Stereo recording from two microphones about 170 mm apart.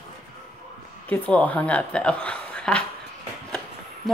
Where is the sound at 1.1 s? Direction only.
10° left (ahead or behind).